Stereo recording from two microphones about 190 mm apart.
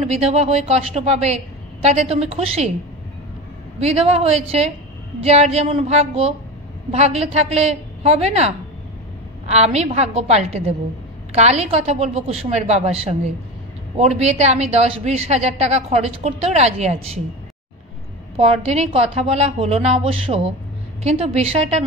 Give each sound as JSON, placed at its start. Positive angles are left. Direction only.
{"t": 0.0, "sound": "speech", "side_deg": -35}
{"t": 3.8, "sound": "speech", "side_deg": -35}
{"t": 18.3, "sound": "speech", "side_deg": -35}